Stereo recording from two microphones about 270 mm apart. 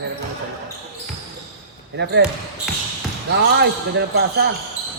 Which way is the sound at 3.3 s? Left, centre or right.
Right.